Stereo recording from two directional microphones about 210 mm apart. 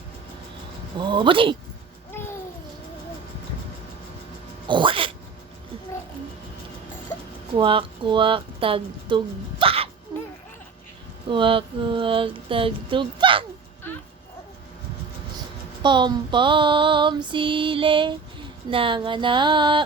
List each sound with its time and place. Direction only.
0.9 s female singing: 20° right (ahead or behind)
2.2 s babbling: 10° left (ahead or behind)
4.7 s music: 25° right (ahead or behind)
7.5 s speech: 25° right (ahead or behind)
10.1 s a sound: 20° right (ahead or behind)
11.3 s female singing: 25° right (ahead or behind)
15.8 s female singing: 20° right (ahead or behind)